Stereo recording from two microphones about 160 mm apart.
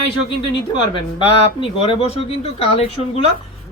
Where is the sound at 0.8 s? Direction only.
35° left (ahead or behind).